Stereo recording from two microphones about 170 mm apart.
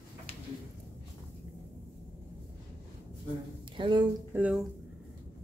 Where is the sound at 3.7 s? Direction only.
25° right (ahead or behind).